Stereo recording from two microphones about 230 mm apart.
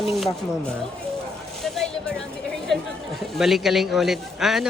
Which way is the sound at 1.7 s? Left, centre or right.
Centre.